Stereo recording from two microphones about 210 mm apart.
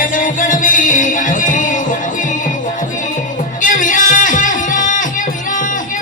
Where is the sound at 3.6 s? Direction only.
40° left (ahead or behind).